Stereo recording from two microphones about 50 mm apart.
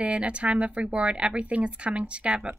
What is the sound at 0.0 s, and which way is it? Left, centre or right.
Speech, right.